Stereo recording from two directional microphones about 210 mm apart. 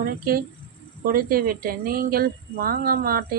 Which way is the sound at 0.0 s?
45° right (ahead or behind).